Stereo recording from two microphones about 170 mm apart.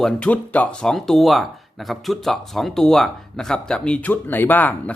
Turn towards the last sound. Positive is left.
turn(degrees=10)  # may be behind; listen again after turning